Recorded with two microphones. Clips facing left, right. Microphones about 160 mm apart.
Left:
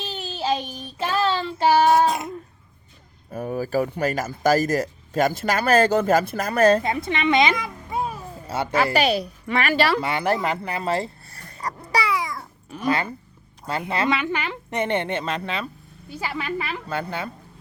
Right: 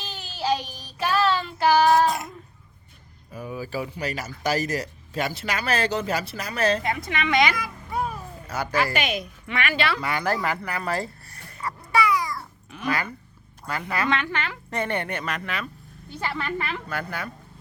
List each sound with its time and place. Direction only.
0.0 s child singing: 25° left (ahead or behind)
3.3 s speech: 45° left (ahead or behind)
6.8 s a child's voice: 25° left (ahead or behind)
10.0 s dog: 25° left (ahead or behind)
12.7 s a woman's voice: 30° left (ahead or behind)
16.0 s a woman's voice: 10° left (ahead or behind)
16.9 s a woman's voice: 25° left (ahead or behind)